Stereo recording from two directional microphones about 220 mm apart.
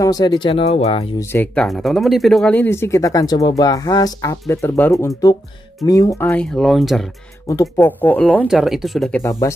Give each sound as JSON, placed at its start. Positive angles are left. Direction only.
{"t": 0.0, "sound": "speech", "side_deg": 15}
{"t": 1.3, "sound": "speech", "side_deg": 5}
{"t": 9.2, "sound": "speech", "side_deg": 15}